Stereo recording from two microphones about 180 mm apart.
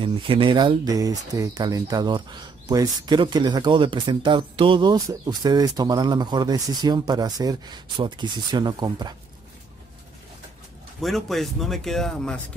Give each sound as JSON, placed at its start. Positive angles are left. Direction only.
{"t": 0.0, "sound": "speech", "side_deg": -30}
{"t": 11.0, "sound": "speech", "side_deg": 0}